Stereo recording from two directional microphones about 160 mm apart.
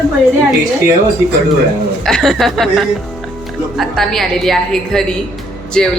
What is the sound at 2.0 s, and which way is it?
Speech, centre (ahead or behind).